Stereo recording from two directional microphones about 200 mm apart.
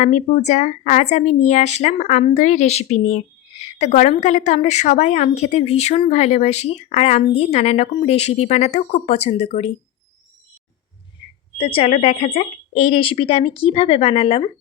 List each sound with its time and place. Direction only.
0.0 s a woman's voice: 35° left (ahead or behind)
11.2 s a sound: 25° left (ahead or behind)
11.5 s speech: 25° left (ahead or behind)